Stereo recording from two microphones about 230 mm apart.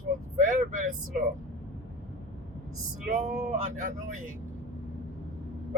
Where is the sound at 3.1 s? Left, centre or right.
Right.